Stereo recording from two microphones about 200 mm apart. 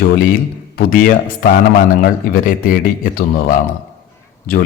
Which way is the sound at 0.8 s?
45° left (ahead or behind).